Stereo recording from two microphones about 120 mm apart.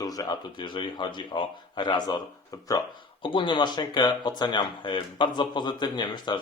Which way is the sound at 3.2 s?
45° left (ahead or behind).